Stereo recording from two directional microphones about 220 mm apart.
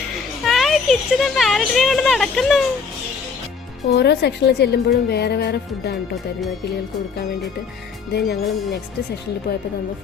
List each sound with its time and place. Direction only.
0.4 s speech: centre (ahead or behind)
3.8 s a woman's voice: 45° left (ahead or behind)
8.1 s a woman's voice: 45° left (ahead or behind)